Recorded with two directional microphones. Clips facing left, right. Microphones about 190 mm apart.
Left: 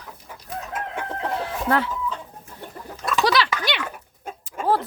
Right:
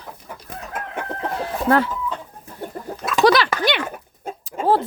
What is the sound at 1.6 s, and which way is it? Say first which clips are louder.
Speech: right 5 dB; 45° right (ahead or behind).